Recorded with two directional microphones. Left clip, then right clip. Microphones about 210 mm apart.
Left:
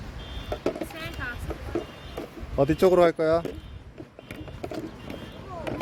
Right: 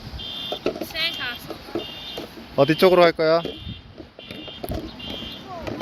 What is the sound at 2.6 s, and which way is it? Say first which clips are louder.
Speech: right 4 dB; 10° right (ahead or behind).